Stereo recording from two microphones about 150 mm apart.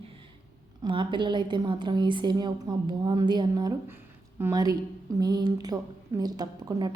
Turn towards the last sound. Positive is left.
turn(degrees=-30)  # may be behind; listen again after turning